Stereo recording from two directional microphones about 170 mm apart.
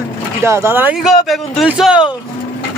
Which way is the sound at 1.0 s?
Centre (ahead or behind).